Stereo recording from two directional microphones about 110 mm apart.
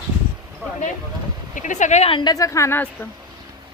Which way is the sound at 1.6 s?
90° left.